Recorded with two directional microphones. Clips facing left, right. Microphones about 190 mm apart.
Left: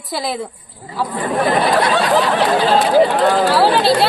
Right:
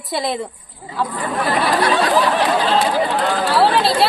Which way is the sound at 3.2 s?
40° left (ahead or behind).